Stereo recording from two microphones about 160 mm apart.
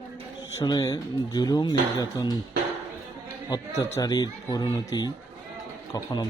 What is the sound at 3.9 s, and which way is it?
Speech, 25° left (ahead or behind).